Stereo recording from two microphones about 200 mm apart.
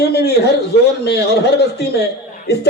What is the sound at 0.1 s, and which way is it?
Speech, 55° left (ahead or behind).